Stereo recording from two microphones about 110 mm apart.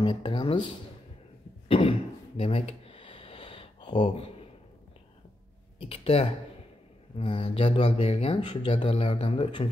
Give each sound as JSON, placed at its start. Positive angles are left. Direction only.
{"t": 0.0, "sound": "speech", "side_deg": 50}
{"t": 1.7, "sound": "a sound", "side_deg": 55}
{"t": 4.0, "sound": "speech", "side_deg": 65}
{"t": 5.8, "sound": "speech", "side_deg": 60}